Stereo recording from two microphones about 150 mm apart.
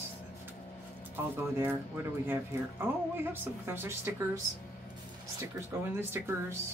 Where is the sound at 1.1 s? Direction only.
15° right (ahead or behind).